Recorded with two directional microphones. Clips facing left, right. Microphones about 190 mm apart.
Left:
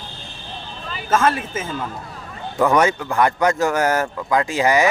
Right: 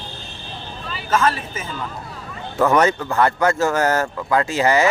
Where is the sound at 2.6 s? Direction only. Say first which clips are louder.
Even; 15° left (ahead or behind).